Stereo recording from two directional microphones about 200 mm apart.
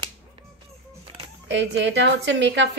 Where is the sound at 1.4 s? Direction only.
65° right (ahead or behind).